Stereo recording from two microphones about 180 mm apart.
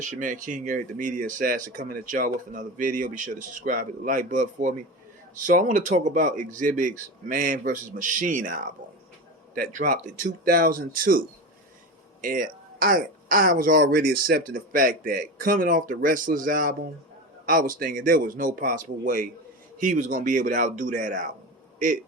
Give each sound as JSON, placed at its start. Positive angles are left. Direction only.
{"t": 0.0, "sound": "speech", "side_deg": -45}